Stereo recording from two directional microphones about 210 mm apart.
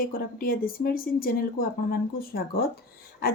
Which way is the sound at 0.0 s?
45° left (ahead or behind).